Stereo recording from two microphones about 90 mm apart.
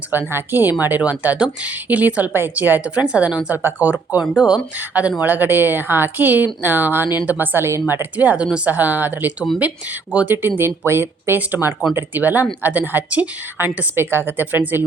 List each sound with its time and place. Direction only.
0.1 s a woman's voice: 25° right (ahead or behind)
8.1 s a woman's voice: 15° right (ahead or behind)
10.6 s a woman's voice: 25° right (ahead or behind)